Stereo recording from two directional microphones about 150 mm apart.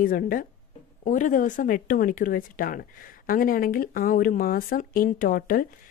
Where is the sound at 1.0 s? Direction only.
60° left (ahead or behind).